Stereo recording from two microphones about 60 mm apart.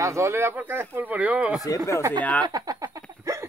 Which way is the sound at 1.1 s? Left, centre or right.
Right.